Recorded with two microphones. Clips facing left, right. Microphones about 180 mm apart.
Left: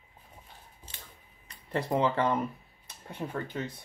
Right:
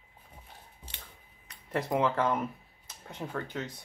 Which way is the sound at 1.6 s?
5° right (ahead or behind).